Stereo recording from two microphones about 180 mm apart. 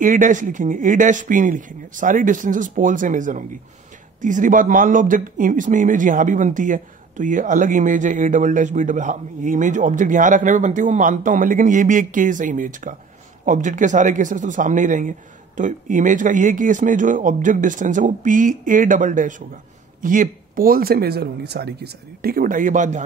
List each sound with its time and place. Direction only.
0.0 s speech: 45° right (ahead or behind)